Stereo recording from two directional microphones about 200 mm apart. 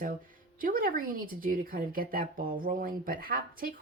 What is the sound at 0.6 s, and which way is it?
A woman's voice, 45° right (ahead or behind).